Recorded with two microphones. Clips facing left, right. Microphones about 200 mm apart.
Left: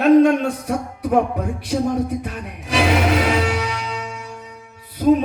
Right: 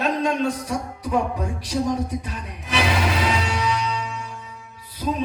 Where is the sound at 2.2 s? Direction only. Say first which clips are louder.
Left 4 dB; 55° left (ahead or behind).